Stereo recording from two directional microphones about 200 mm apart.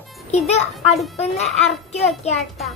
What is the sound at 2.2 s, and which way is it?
Speech, 30° left (ahead or behind).